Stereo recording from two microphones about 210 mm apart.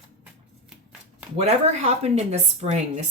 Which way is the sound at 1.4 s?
30° right (ahead or behind).